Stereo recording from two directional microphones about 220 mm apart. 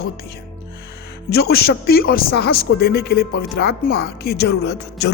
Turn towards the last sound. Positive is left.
turn(degrees=50)  # may be behind; listen again after turning